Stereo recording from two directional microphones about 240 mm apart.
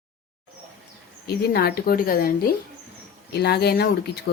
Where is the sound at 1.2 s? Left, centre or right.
Left.